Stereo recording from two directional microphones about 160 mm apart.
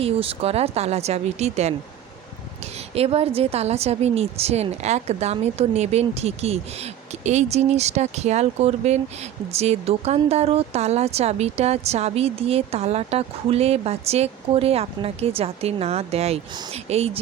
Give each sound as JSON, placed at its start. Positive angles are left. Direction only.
{"t": 0.0, "sound": "a woman's voice", "side_deg": -40}
{"t": 2.7, "sound": "a woman's voice", "side_deg": -40}